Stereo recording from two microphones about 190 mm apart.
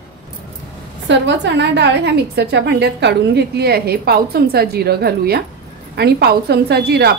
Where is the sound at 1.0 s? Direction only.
70° right (ahead or behind).